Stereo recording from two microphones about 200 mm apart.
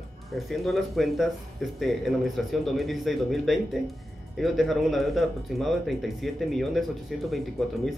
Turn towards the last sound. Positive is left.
turn(degrees=0)  # may be behind; listen again after turning